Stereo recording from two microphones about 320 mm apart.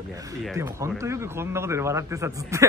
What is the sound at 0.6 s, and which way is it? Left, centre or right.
Speech, centre.